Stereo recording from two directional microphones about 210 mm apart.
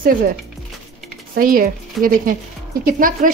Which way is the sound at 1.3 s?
40° right (ahead or behind).